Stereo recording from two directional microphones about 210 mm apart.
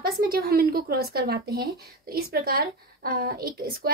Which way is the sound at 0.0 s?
45° right (ahead or behind).